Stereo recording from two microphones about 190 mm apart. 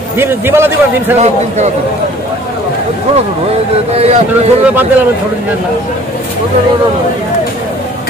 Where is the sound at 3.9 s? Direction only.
35° right (ahead or behind).